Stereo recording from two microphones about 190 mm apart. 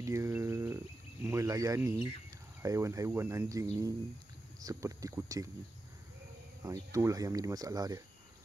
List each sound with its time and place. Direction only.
0.0 s a sound: 15° right (ahead or behind)
1.2 s cricket: 15° right (ahead or behind)
2.6 s speech: 15° right (ahead or behind)
6.6 s speech: 15° right (ahead or behind)